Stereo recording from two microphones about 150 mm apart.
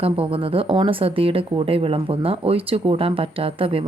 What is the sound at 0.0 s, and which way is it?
Speech, 40° right (ahead or behind).